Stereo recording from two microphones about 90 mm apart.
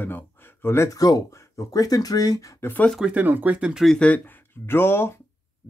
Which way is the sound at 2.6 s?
20° left (ahead or behind).